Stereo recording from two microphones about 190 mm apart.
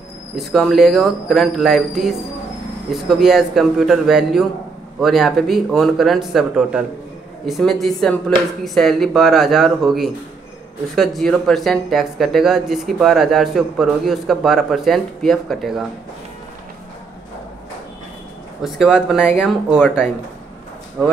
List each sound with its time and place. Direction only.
0.4 s speech: centre (ahead or behind)
18.6 s speech: centre (ahead or behind)